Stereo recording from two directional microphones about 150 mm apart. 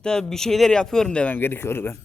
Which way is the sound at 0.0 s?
5° left (ahead or behind).